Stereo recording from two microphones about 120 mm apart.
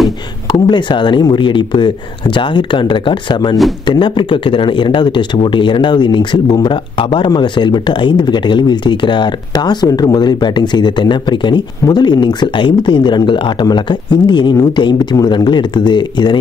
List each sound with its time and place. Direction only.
0.7 s speech: 40° left (ahead or behind)